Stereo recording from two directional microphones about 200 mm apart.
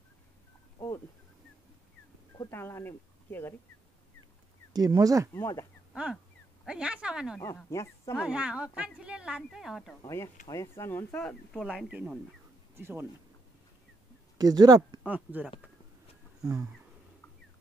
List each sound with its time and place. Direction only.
0.7 s a sound: 15° left (ahead or behind)
2.3 s speech: 15° left (ahead or behind)
4.7 s speech: 20° right (ahead or behind)
5.3 s speech: 15° left (ahead or behind)
6.6 s a woman's voice: 5° right (ahead or behind)
7.3 s speech: 15° left (ahead or behind)
8.2 s a woman's voice: 5° right (ahead or behind)
10.0 s speech: 15° left (ahead or behind); by 13.0 s 10° right (ahead or behind)
14.4 s speech: 20° right (ahead or behind)
15.0 s speech: 5° right (ahead or behind)
16.4 s speech: 15° right (ahead or behind)